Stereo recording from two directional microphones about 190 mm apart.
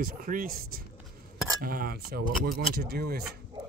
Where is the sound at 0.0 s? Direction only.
50° right (ahead or behind).